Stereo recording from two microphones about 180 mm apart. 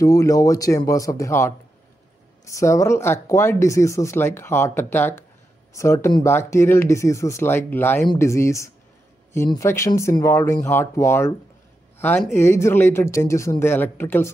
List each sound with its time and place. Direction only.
0.0 s speech: 20° left (ahead or behind)
2.5 s speech: 15° left (ahead or behind)